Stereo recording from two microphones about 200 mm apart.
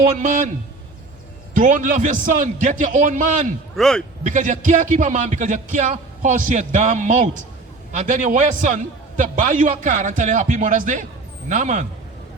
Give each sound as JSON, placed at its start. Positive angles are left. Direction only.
{"t": 0.0, "sound": "a man's voice", "side_deg": -40}
{"t": 1.5, "sound": "a man's voice", "side_deg": -40}
{"t": 3.8, "sound": "a man's voice", "side_deg": 0}
{"t": 4.3, "sound": "a man's voice", "side_deg": -40}